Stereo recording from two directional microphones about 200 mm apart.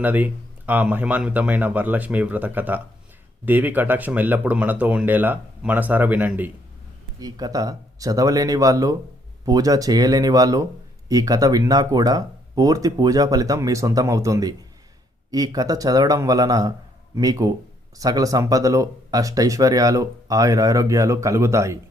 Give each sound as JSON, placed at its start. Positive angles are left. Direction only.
{"t": 0.0, "sound": "speech", "side_deg": -10}
{"t": 7.2, "sound": "speech", "side_deg": -20}